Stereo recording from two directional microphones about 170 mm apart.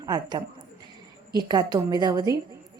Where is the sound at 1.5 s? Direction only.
25° right (ahead or behind).